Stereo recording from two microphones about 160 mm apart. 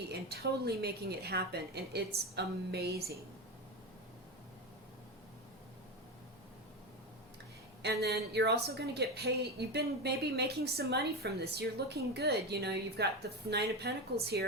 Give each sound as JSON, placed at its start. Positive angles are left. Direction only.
{"t": 0.1, "sound": "a woman's voice", "side_deg": -85}
{"t": 7.8, "sound": "a woman's voice", "side_deg": -90}